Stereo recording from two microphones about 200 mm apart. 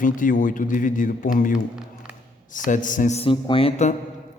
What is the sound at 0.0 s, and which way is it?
Speech, 40° left (ahead or behind).